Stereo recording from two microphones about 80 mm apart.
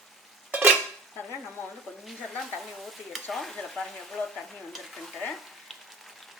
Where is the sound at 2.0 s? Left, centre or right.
Centre.